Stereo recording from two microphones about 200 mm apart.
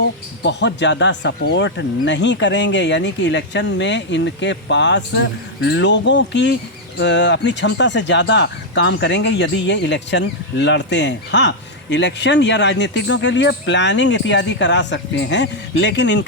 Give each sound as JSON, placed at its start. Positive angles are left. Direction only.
{"t": 0.4, "sound": "speech", "side_deg": 60}